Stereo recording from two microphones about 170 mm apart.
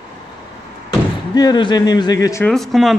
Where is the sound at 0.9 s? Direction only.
25° left (ahead or behind).